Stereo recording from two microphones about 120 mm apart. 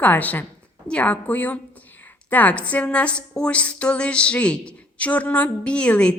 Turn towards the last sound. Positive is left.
turn(degrees=10)  # may be behind; listen again after turning